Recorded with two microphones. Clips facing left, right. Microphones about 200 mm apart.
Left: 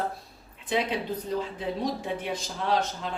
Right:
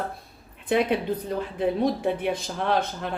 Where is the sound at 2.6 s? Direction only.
60° right (ahead or behind).